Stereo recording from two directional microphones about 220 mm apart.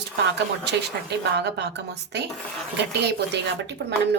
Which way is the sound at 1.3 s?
50° right (ahead or behind).